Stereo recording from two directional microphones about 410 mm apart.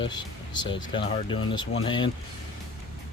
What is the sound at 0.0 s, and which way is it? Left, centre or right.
Speech, centre.